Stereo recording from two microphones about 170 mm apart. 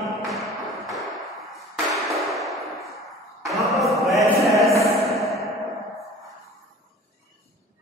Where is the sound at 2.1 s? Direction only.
Centre (ahead or behind).